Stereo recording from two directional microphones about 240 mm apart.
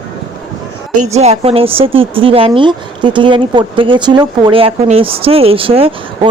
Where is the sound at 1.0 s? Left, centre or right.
Right.